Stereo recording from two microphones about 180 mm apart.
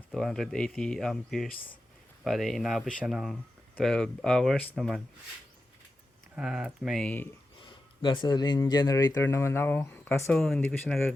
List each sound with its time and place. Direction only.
0.1 s speech: centre (ahead or behind)
6.3 s speech: 5° right (ahead or behind)
7.6 s speech: 25° left (ahead or behind)
10.3 s speech: 5° left (ahead or behind)